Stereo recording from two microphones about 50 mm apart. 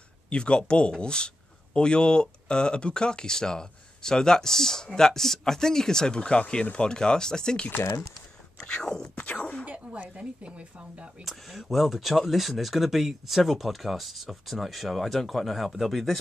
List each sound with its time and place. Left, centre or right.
0.3 s a man's voice: centre
8.6 s a man's voice: centre
9.1 s a sound: left
9.7 s speech: right
11.2 s speech: centre